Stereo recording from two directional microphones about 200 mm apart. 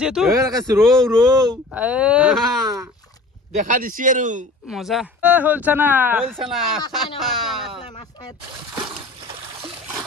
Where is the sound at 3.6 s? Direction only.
40° right (ahead or behind).